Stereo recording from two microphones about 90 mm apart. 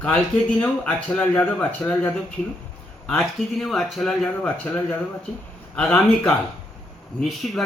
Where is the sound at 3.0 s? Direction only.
Centre (ahead or behind).